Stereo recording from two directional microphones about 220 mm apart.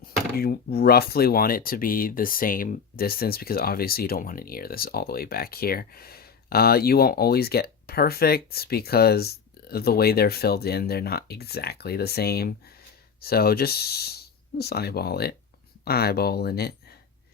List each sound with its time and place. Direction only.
0.3 s speech: 45° left (ahead or behind)